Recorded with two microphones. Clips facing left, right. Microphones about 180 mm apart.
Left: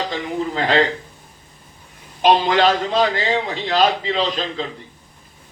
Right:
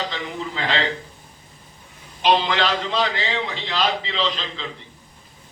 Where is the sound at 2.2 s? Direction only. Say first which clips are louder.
Left 5 dB; 45° left (ahead or behind).